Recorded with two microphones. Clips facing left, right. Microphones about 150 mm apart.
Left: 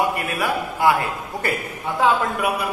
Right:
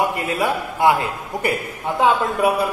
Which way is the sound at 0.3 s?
20° right (ahead or behind).